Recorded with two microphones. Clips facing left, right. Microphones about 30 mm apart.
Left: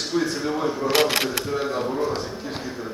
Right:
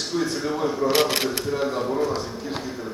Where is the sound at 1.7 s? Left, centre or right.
Centre.